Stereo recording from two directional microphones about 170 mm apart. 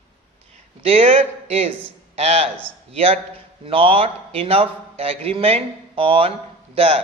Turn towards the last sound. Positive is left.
turn(degrees=-35)  # may be behind; listen again after turning